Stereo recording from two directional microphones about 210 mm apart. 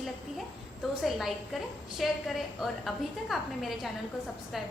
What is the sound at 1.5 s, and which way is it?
A woman's voice, centre (ahead or behind).